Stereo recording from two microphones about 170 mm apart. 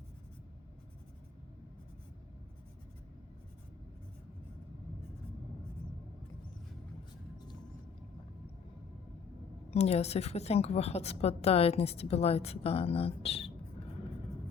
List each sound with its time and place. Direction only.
9.6 s a woman's voice: 40° left (ahead or behind)